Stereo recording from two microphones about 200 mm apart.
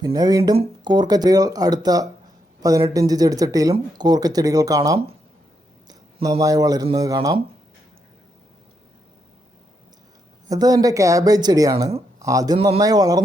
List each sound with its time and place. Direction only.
0.0 s speech: 20° right (ahead or behind)
5.9 s a sound: 25° right (ahead or behind)
6.4 s speech: 20° right (ahead or behind)
10.5 s speech: 20° right (ahead or behind)